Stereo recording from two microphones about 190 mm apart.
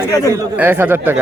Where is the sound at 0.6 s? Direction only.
10° right (ahead or behind).